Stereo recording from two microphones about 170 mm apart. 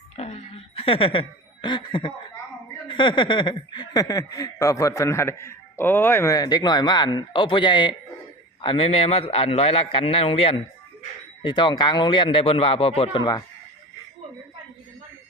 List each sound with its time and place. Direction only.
0.2 s chuckle: 35° left (ahead or behind)
2.8 s a man's voice: 30° left (ahead or behind)